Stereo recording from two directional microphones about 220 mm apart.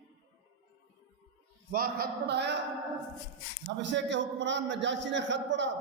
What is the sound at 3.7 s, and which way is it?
A man's voice, 55° right (ahead or behind).